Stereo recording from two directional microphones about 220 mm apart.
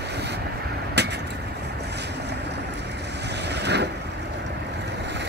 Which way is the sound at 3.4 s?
50° right (ahead or behind).